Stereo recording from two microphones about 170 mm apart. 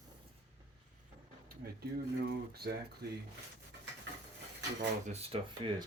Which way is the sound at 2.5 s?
70° right (ahead or behind).